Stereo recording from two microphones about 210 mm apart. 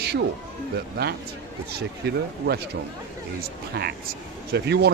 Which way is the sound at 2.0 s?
50° right (ahead or behind).